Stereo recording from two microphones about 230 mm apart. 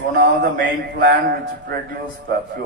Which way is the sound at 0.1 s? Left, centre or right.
Right.